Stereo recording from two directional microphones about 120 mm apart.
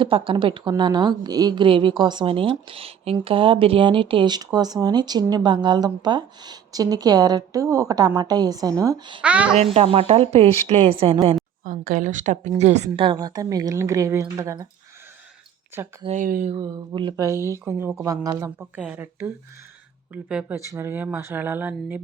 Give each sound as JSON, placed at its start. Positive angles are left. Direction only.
{"t": 0.0, "sound": "a woman's voice", "side_deg": -45}
{"t": 9.2, "sound": "speech", "side_deg": -10}
{"t": 9.7, "sound": "a woman's voice", "side_deg": -55}
{"t": 11.6, "sound": "a woman's voice", "side_deg": -90}
{"t": 13.1, "sound": "speech", "side_deg": -30}
{"t": 16.0, "sound": "speech", "side_deg": -75}
{"t": 16.6, "sound": "a woman's voice", "side_deg": -40}
{"t": 17.2, "sound": "speech", "side_deg": -25}
{"t": 18.9, "sound": "speech", "side_deg": -15}
{"t": 20.7, "sound": "speech", "side_deg": -20}